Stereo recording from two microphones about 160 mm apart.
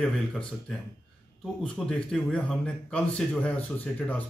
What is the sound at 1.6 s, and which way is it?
A man's voice, 5° left (ahead or behind).